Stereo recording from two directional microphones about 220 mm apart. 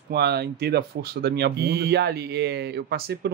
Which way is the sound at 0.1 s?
50° right (ahead or behind).